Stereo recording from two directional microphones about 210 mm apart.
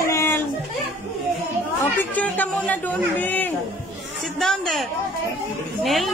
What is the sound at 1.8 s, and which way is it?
Speech, 10° left (ahead or behind).